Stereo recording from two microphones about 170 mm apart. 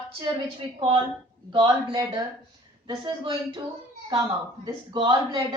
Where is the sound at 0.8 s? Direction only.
30° right (ahead or behind).